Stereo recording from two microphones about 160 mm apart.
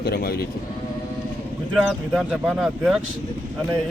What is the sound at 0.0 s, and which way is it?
Speech, 75° left (ahead or behind).